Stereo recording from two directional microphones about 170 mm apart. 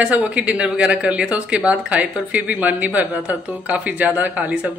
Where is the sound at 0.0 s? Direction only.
5° right (ahead or behind).